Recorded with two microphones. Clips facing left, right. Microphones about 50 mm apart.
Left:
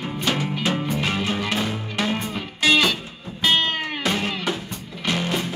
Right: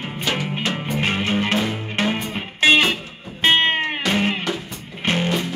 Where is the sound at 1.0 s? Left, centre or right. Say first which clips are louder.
Right 3 dB; right.